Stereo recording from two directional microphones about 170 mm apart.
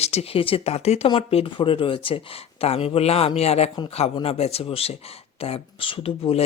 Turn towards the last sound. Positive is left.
turn(degrees=35)  # may be behind; listen again after turning